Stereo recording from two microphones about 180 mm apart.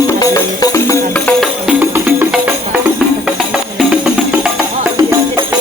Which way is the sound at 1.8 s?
10° right (ahead or behind).